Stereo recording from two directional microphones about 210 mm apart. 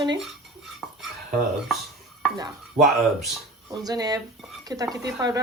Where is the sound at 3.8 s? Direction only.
20° right (ahead or behind).